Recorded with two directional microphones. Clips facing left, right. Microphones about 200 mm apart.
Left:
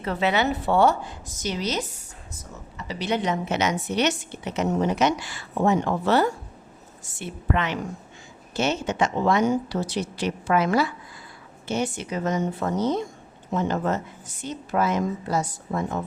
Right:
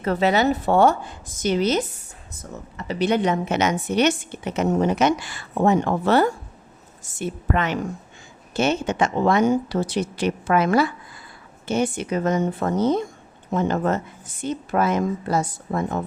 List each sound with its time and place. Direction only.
0.0 s a woman's voice: 40° right (ahead or behind)